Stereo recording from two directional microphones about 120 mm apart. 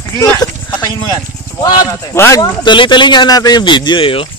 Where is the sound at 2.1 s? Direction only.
25° left (ahead or behind); by 4.2 s 45° left (ahead or behind).